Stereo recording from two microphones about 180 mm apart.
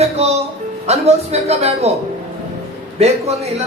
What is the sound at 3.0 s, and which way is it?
Speech, 35° right (ahead or behind).